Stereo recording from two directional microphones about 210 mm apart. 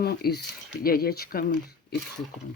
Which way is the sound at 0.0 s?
50° left (ahead or behind).